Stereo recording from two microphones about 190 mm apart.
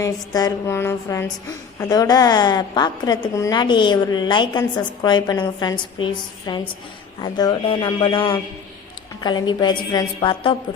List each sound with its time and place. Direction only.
0.0 s a woman's voice: 15° left (ahead or behind)